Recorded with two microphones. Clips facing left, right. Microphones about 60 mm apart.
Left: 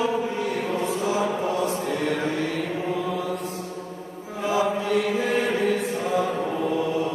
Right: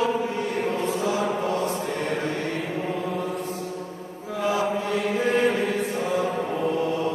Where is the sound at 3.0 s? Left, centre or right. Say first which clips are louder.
Left 1 dB; left.